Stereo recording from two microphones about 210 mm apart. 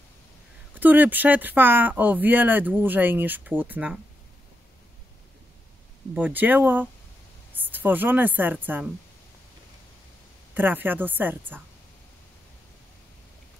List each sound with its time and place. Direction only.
0.7 s speech: 10° right (ahead or behind)
6.1 s a woman's voice: 10° right (ahead or behind)
10.5 s speech: 10° right (ahead or behind)